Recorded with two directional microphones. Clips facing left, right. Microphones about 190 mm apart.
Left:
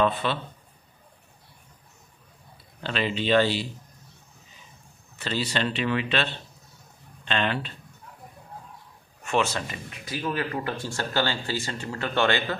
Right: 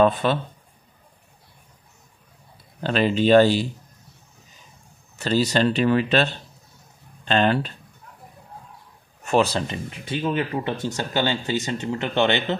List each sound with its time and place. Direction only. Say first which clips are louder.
0.0 s speech: right 6 dB; 45° right (ahead or behind)
2.8 s speech: right 8 dB; 45° right (ahead or behind)
5.1 s speech: right 8 dB; 40° right (ahead or behind)
9.2 s speech: right 5 dB; 35° right (ahead or behind); by 12.5 s 20° right (ahead or behind)